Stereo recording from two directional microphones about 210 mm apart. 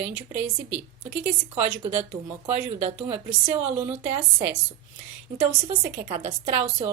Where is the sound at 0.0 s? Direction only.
10° right (ahead or behind).